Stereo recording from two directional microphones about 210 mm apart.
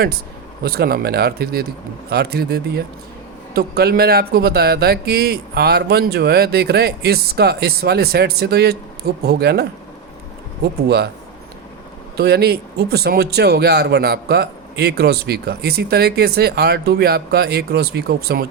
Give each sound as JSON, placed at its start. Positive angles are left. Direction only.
{"t": 0.6, "sound": "a man's voice", "side_deg": -45}
{"t": 12.1, "sound": "a man's voice", "side_deg": -50}